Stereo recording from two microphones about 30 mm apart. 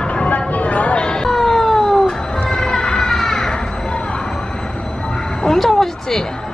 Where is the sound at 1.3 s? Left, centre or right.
Centre.